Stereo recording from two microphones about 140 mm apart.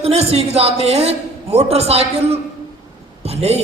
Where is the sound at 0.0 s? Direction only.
50° right (ahead or behind).